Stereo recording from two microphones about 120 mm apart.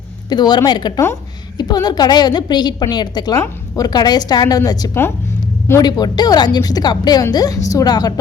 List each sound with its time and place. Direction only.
0.3 s speech: 35° left (ahead or behind)